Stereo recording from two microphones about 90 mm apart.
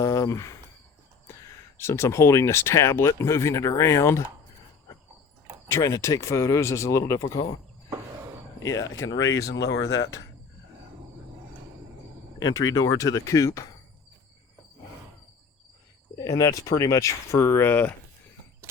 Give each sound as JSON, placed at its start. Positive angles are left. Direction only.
{"t": 0.0, "sound": "speech", "side_deg": 35}
{"t": 5.6, "sound": "speech", "side_deg": 35}
{"t": 7.2, "sound": "speech", "side_deg": 45}
{"t": 8.6, "sound": "speech", "side_deg": 40}
{"t": 12.5, "sound": "speech", "side_deg": 40}
{"t": 16.1, "sound": "speech", "side_deg": 40}
{"t": 17.6, "sound": "speech", "side_deg": 20}